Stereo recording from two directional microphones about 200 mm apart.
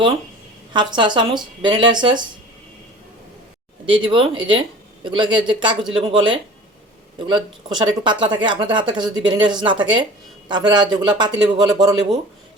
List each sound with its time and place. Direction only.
0.7 s speech: 20° right (ahead or behind)
4.0 s speech: 25° right (ahead or behind)